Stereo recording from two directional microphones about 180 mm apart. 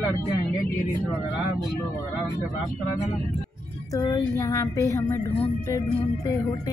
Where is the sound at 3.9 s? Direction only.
20° left (ahead or behind).